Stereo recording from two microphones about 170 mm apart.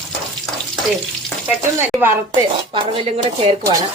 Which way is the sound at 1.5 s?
10° right (ahead or behind).